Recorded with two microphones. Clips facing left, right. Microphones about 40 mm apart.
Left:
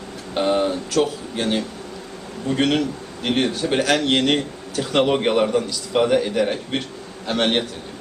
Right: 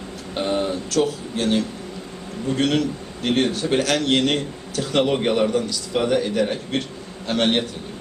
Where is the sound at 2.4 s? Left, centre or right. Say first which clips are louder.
Left 1 dB; centre.